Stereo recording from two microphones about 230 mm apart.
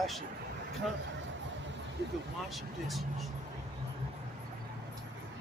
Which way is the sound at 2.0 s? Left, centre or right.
Right.